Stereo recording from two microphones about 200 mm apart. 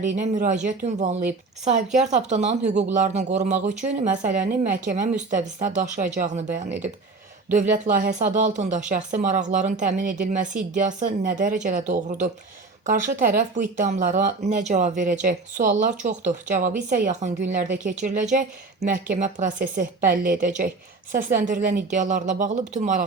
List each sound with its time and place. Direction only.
0.0 s a woman's voice: 40° right (ahead or behind)